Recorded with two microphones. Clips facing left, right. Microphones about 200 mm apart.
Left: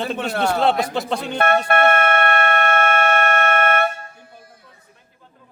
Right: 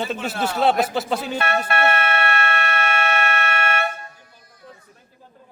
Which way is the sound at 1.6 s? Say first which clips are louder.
Left 4 dB; 55° left (ahead or behind).